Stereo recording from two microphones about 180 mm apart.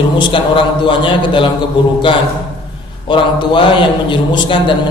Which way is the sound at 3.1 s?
25° left (ahead or behind).